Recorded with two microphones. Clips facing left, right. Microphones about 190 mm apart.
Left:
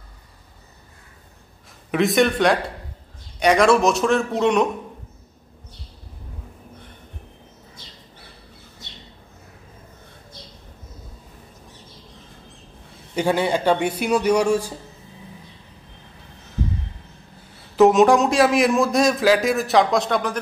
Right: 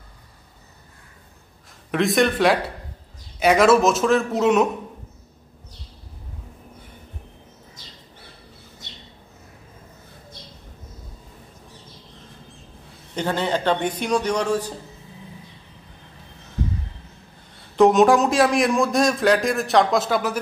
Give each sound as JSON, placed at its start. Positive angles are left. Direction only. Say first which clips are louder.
{"t": 1.9, "sound": "a man's voice", "louder": "left 1 dB", "side_deg": 0}
{"t": 13.1, "sound": "a man's voice", "louder": "left 3 dB", "side_deg": 10}
{"t": 17.7, "sound": "a man's voice", "louder": "left 1 dB", "side_deg": 0}